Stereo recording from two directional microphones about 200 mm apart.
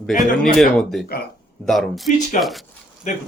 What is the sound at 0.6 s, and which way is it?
Speech, centre (ahead or behind).